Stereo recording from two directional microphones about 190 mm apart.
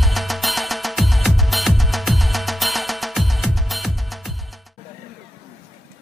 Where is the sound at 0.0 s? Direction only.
Centre (ahead or behind).